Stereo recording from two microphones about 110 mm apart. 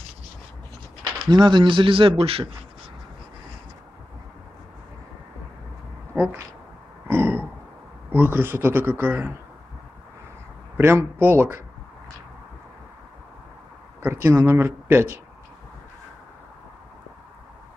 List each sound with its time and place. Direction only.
1.3 s speech: 45° right (ahead or behind)
7.1 s burping: 20° right (ahead or behind)
8.1 s speech: 20° right (ahead or behind)
10.8 s speech: 20° right (ahead or behind)
14.0 s speech: 20° right (ahead or behind)